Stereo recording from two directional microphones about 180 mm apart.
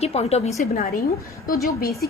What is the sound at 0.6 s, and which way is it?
Speech, 45° left (ahead or behind).